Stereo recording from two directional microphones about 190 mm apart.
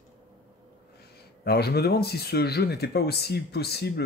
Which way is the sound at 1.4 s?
60° left (ahead or behind).